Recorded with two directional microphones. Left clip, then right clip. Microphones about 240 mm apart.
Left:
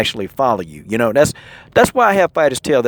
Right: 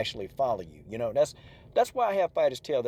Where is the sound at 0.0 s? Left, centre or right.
Left.